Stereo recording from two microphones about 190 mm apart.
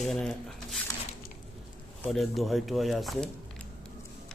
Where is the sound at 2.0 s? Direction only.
Centre (ahead or behind).